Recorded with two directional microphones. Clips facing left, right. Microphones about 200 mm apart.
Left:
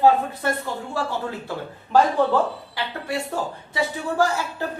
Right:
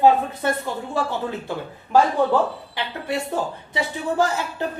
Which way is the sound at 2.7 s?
20° right (ahead or behind).